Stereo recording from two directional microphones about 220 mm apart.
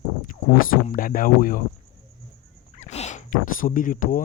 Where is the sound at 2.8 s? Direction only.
30° left (ahead or behind).